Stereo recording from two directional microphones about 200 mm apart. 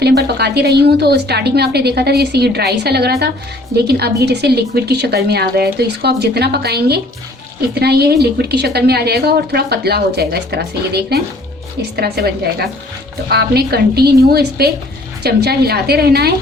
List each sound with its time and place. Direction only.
0.0 s a woman's voice: 55° right (ahead or behind)